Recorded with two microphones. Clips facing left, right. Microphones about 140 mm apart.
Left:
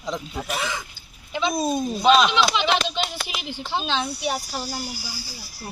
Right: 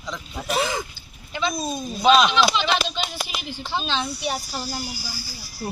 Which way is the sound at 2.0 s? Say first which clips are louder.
Right 1 dB; 5° right (ahead or behind).